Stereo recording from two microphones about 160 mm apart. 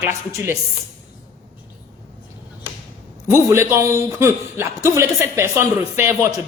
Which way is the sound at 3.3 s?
15° right (ahead or behind).